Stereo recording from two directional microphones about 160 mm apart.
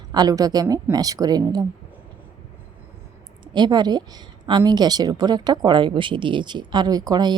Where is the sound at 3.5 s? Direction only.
25° right (ahead or behind).